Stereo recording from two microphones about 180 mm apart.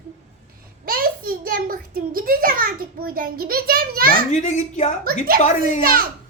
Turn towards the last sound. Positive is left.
turn(degrees=-55)  # may be behind; listen again after turning